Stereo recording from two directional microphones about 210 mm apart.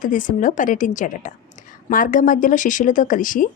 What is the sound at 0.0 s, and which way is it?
A woman's voice, 40° left (ahead or behind).